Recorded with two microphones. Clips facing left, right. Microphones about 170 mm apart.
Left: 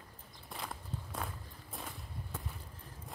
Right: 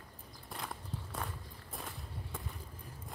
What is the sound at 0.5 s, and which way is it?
Walk, centre (ahead or behind).